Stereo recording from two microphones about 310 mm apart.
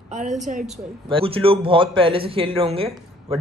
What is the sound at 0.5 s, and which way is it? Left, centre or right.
Speech, right.